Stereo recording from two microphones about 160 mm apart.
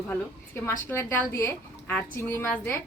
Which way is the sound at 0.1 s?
10° left (ahead or behind).